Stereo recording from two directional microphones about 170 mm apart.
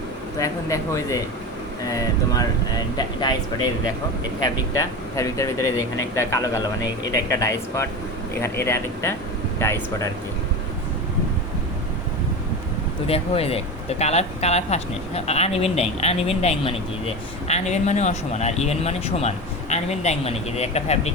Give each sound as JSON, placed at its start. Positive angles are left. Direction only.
{"t": 0.3, "sound": "speech", "side_deg": 20}
{"t": 4.7, "sound": "speech", "side_deg": 20}
{"t": 13.1, "sound": "speech", "side_deg": 35}